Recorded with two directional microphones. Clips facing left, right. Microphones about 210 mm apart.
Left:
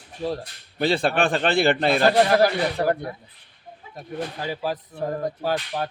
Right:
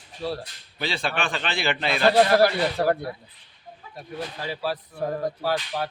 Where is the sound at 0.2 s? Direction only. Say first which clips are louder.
Left 3 dB; 15° left (ahead or behind).